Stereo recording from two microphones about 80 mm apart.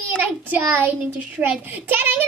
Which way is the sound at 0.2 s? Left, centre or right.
Right.